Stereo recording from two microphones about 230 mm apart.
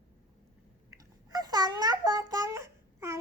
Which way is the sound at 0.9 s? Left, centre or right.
Centre.